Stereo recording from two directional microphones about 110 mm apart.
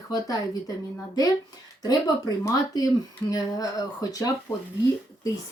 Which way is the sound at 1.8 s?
35° left (ahead or behind).